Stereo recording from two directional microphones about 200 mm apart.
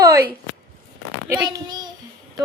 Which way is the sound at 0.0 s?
15° right (ahead or behind).